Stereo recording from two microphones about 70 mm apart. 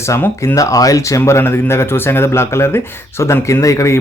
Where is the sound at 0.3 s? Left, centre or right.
Left.